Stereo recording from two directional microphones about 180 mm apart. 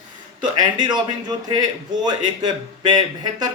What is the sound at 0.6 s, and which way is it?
A man's voice, 25° right (ahead or behind).